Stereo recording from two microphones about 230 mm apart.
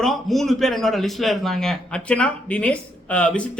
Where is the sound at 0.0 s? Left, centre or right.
Centre.